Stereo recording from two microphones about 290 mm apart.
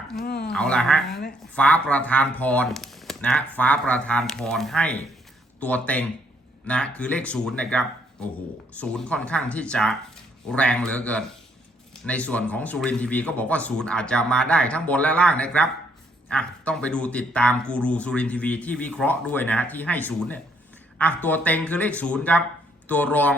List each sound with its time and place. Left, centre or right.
0.2 s speech: left
0.5 s speech: centre